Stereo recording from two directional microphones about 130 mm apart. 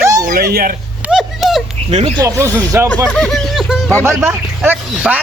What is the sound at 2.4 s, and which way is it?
Speech, 20° right (ahead or behind).